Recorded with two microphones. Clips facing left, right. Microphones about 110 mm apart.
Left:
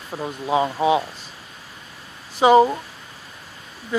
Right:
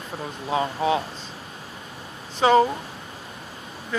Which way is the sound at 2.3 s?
15° left (ahead or behind).